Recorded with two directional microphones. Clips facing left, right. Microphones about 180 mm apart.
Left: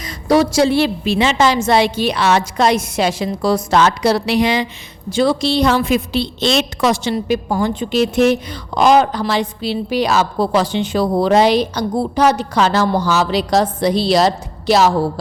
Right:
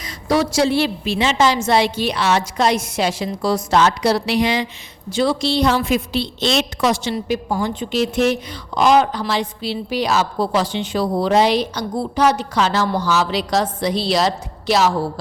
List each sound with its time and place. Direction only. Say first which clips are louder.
0.0 s a woman's voice: left 4 dB; 45° left (ahead or behind); by 4.6 s 65° left (ahead or behind)
5.1 s a woman's voice: left 3 dB; 50° left (ahead or behind)